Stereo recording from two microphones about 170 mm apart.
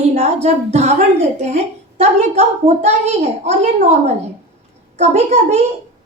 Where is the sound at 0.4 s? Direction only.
40° right (ahead or behind).